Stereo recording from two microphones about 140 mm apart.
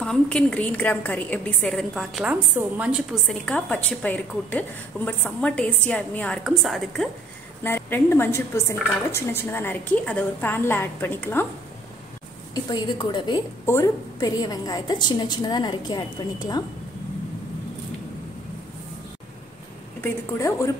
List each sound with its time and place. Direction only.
0.0 s a woman's voice: 5° left (ahead or behind)
3.3 s a woman's voice: 10° left (ahead or behind)
7.6 s a woman's voice: 15° left (ahead or behind)
12.6 s a woman's voice: 30° left (ahead or behind)
13.7 s a woman's voice: 20° left (ahead or behind)
20.0 s a woman's voice: 20° left (ahead or behind)